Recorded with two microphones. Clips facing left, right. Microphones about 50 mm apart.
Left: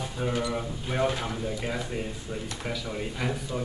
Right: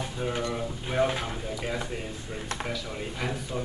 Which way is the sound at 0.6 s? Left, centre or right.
Centre.